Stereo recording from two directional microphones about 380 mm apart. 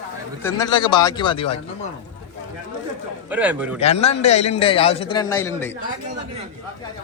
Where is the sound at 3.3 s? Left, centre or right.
Centre.